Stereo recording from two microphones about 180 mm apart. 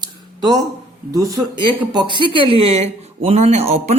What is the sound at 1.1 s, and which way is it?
Speech, 20° right (ahead or behind).